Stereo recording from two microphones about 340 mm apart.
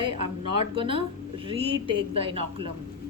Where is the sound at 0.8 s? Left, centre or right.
Centre.